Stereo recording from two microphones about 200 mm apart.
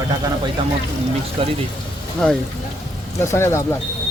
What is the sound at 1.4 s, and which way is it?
Speech, 25° right (ahead or behind).